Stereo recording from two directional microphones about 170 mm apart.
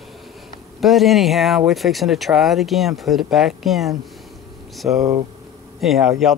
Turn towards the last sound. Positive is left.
turn(degrees=0)  # may be behind; listen again after turning